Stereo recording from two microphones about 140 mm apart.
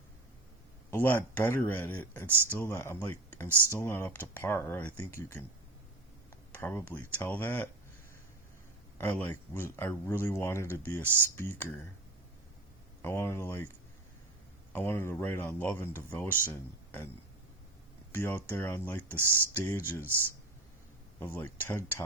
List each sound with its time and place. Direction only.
0.9 s speech: 15° left (ahead or behind)
6.6 s speech: 15° left (ahead or behind)
9.0 s speech: 10° left (ahead or behind)
13.0 s speech: 15° left (ahead or behind)
14.7 s speech: 15° left (ahead or behind)
18.1 s speech: 15° left (ahead or behind)
21.2 s speech: 15° left (ahead or behind)